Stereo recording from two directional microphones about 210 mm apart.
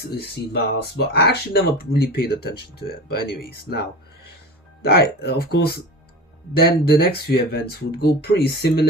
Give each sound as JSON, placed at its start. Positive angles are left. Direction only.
{"t": 0.5, "sound": "speech", "side_deg": 50}
{"t": 4.8, "sound": "speech", "side_deg": 50}